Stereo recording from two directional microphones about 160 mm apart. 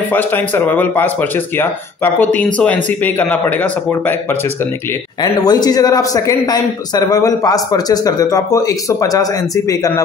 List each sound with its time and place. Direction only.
0.1 s a man's voice: 10° left (ahead or behind)
2.1 s a man's voice: 10° left (ahead or behind)
5.2 s a man's voice: 25° left (ahead or behind)